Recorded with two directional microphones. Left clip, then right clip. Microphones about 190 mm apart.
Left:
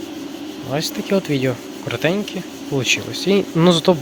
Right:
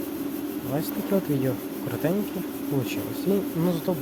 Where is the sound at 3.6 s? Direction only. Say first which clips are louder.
Left 12 dB; 25° left (ahead or behind).